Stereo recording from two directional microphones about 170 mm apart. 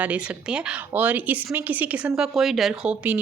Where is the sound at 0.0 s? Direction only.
5° right (ahead or behind).